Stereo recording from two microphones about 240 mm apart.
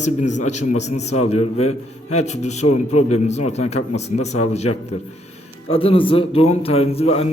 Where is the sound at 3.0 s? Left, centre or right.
Left.